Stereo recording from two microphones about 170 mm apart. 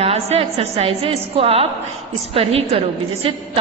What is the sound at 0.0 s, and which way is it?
A woman's voice, 35° right (ahead or behind).